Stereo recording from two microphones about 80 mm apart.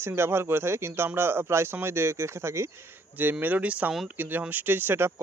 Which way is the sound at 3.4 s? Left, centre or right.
Centre.